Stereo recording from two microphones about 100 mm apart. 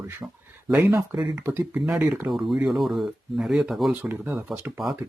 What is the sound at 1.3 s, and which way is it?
Speech, 25° right (ahead or behind).